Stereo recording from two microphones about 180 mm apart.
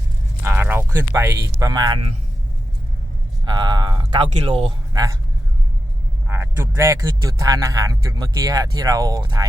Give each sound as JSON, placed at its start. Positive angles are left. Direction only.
{"t": 0.4, "sound": "speech", "side_deg": -15}
{"t": 3.4, "sound": "speech", "side_deg": -25}
{"t": 6.2, "sound": "speech", "side_deg": -15}